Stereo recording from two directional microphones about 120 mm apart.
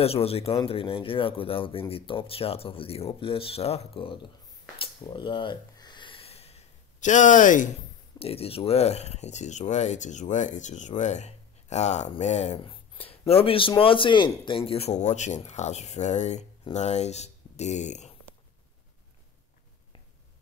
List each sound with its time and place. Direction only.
0.0 s speech: 55° left (ahead or behind)
4.7 s a sound: 45° left (ahead or behind); by 7.7 s 90° left
8.2 s speech: 55° left (ahead or behind); by 12.5 s 70° left (ahead or behind)
12.6 s a sound: 50° left (ahead or behind)
13.3 s speech: 50° left (ahead or behind)
14.7 s speech: 60° left (ahead or behind)